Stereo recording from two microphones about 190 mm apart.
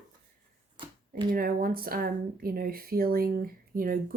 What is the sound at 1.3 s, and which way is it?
Speech, 50° right (ahead or behind).